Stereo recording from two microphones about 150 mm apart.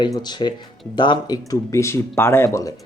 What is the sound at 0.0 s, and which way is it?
Speech, 30° left (ahead or behind).